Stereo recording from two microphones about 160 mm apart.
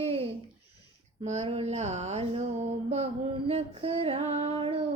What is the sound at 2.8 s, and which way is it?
Female singing, 40° right (ahead or behind).